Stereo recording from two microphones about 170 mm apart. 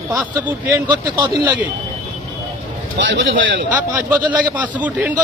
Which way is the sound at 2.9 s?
90° right.